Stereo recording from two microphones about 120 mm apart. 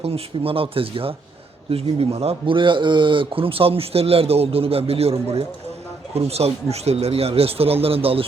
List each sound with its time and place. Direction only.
0.0 s speech: 55° right (ahead or behind)